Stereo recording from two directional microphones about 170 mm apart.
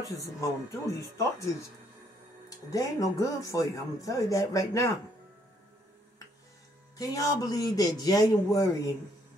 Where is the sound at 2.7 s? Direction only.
20° left (ahead or behind).